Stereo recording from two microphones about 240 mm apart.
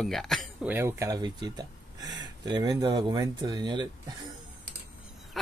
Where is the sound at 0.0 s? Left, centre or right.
Centre.